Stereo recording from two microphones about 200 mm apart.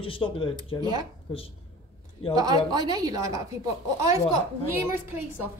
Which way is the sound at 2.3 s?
20° right (ahead or behind).